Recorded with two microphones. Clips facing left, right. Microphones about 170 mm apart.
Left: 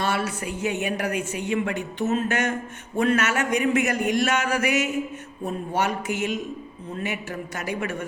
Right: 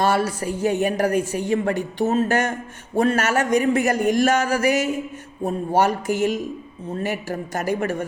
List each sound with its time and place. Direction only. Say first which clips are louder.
0.0 s a woman's voice: right 6 dB; 40° right (ahead or behind)